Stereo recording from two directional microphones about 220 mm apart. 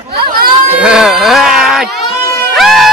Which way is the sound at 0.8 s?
5° right (ahead or behind).